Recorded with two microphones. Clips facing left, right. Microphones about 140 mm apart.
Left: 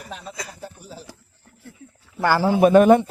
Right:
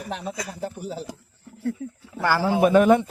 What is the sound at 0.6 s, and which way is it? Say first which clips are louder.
Speech: right 8 dB; 55° right (ahead or behind).